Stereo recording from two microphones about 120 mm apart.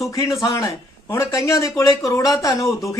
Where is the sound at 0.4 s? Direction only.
30° left (ahead or behind).